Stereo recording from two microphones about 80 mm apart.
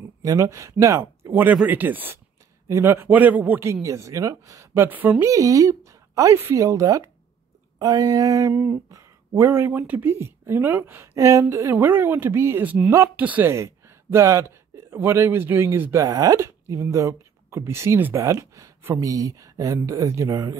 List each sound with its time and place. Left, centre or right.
0.2 s speech: right
1.7 s speech: right
3.8 s speech: right
4.7 s speech: right
5.2 s a woman's voice: right
7.8 s speech: right
8.9 s a sound: right
9.7 s speech: right
11.1 s speech: right; by 13.5 s centre
13.5 s speech: right